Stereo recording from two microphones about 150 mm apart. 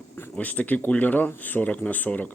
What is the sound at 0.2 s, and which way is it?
Speech, 10° left (ahead or behind).